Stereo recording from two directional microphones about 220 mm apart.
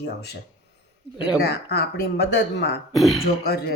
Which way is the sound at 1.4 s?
45° left (ahead or behind).